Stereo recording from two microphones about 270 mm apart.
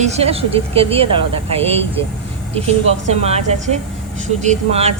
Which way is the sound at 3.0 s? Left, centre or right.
Right.